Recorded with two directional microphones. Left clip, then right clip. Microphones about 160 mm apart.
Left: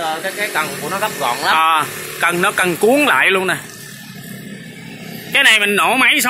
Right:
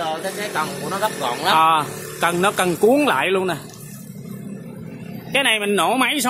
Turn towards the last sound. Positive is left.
turn(degrees=-10)  # may be behind; listen again after turning